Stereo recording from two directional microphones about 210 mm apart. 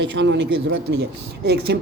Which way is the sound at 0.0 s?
55° right (ahead or behind).